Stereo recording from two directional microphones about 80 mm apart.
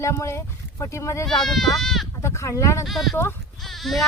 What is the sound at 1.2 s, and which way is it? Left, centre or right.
Speech, centre.